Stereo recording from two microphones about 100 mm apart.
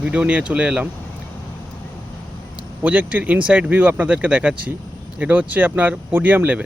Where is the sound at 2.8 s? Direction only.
15° right (ahead or behind).